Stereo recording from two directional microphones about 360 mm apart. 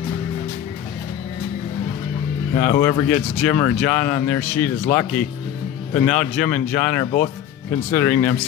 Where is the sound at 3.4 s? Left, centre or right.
Centre.